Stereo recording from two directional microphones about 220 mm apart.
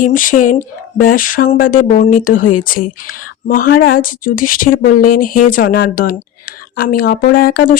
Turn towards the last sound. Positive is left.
turn(degrees=40)  # may be behind; listen again after turning